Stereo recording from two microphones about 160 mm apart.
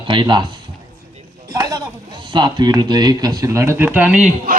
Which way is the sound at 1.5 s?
25° right (ahead or behind).